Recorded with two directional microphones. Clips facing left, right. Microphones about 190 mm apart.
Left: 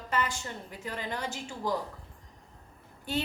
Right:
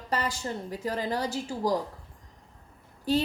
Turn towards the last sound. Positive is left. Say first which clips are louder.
# right 7 dB
turn(degrees=-35)  # may be behind; listen again after turning